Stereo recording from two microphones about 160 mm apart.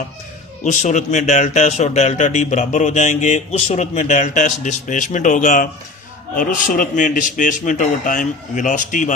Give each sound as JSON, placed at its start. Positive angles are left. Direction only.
{"t": 0.6, "sound": "speech", "side_deg": 50}